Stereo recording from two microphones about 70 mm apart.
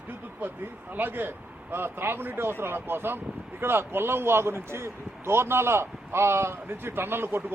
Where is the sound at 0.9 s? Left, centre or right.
Right.